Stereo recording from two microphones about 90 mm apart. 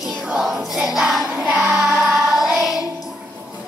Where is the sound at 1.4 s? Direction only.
5° right (ahead or behind).